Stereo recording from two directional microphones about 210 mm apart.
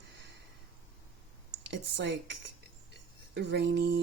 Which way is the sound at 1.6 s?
55° right (ahead or behind).